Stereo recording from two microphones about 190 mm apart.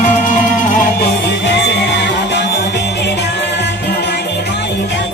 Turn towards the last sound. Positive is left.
turn(degrees=60)  # may be behind; listen again after turning